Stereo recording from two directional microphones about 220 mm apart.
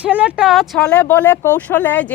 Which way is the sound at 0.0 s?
5° right (ahead or behind).